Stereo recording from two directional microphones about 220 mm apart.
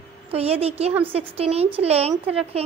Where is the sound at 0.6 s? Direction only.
30° right (ahead or behind).